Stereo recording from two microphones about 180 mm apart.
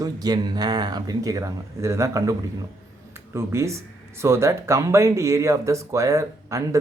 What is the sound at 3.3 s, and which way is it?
Speech, 15° right (ahead or behind).